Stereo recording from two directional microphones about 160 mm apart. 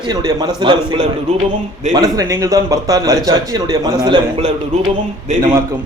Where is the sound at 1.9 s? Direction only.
25° right (ahead or behind).